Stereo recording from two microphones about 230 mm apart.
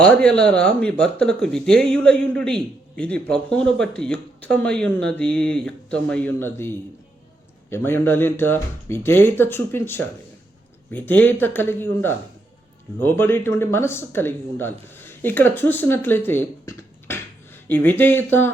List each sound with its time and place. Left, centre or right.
0.0 s speech: centre
7.7 s speech: centre